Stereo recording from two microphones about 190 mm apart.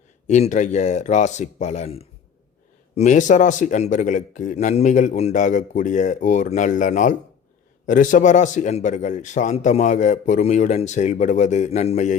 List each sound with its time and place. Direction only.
0.3 s a man's voice: 35° left (ahead or behind)